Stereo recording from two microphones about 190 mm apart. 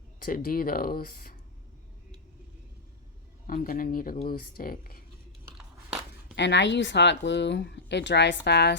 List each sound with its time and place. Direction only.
0.2 s speech: 50° left (ahead or behind)
3.4 s speech: 50° left (ahead or behind)
6.3 s speech: 70° left (ahead or behind)